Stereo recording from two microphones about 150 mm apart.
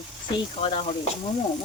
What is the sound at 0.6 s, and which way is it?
Speech, 40° left (ahead or behind).